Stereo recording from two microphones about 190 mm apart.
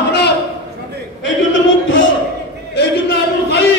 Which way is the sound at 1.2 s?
90° left.